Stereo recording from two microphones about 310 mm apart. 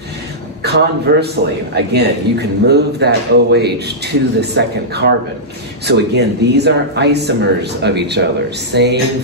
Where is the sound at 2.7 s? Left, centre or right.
Right.